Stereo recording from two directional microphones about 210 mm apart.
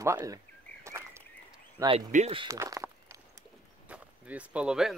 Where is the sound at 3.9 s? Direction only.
5° right (ahead or behind).